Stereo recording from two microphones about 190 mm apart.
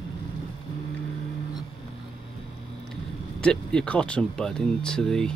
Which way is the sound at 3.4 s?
5° left (ahead or behind).